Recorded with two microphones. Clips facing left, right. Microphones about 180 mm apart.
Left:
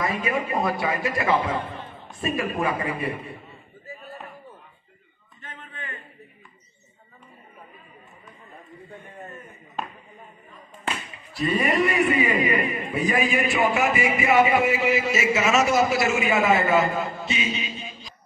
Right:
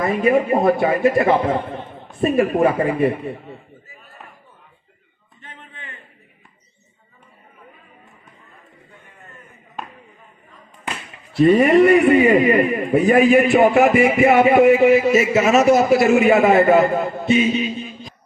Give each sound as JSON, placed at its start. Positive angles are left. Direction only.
{"t": 0.0, "sound": "a man's voice", "side_deg": -55}
{"t": 2.6, "sound": "speech", "side_deg": -45}
{"t": 11.3, "sound": "a man's voice", "side_deg": -65}
{"t": 12.2, "sound": "a man's voice", "side_deg": -45}
{"t": 15.3, "sound": "a man's voice", "side_deg": -40}
{"t": 15.7, "sound": "a man's voice", "side_deg": -55}